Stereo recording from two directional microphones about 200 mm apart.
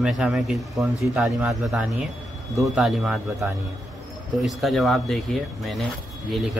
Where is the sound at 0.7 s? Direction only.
15° right (ahead or behind).